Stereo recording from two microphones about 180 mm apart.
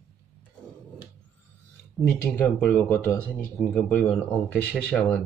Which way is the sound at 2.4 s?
10° left (ahead or behind).